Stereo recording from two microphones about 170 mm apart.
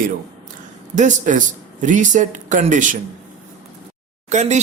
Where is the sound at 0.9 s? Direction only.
45° right (ahead or behind).